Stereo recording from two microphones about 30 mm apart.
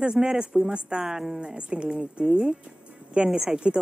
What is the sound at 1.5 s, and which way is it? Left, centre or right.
A woman's voice, right.